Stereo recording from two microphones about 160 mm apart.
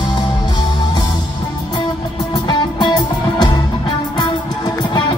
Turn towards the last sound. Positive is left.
turn(degrees=25)  # may be behind; listen again after turning